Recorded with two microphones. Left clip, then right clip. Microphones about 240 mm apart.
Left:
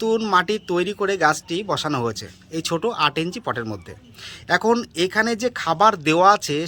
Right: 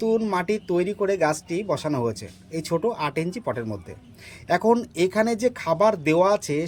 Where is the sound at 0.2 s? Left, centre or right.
Centre.